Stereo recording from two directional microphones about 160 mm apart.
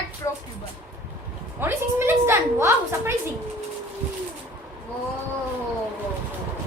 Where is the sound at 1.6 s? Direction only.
15° right (ahead or behind).